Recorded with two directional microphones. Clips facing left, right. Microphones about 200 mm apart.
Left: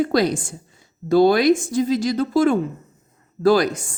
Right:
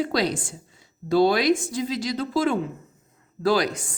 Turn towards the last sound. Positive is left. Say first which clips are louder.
# left 5 dB
turn(degrees=50)  # may be behind; listen again after turning